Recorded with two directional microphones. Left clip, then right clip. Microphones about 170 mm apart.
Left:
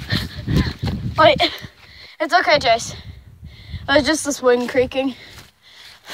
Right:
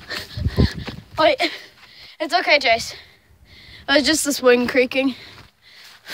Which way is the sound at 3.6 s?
15° right (ahead or behind).